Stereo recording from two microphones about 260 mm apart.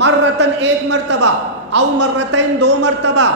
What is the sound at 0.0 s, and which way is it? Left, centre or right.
A man's voice, right.